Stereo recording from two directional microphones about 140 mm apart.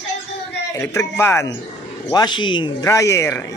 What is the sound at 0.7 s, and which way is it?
Speech, 20° left (ahead or behind).